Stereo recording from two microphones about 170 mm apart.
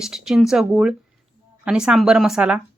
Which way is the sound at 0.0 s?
5° right (ahead or behind).